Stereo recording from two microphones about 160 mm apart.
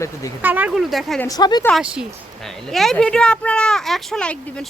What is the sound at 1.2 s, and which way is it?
Speech, 25° left (ahead or behind).